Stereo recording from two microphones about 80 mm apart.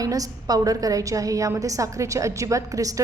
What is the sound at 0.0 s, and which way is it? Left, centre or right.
A woman's voice, right.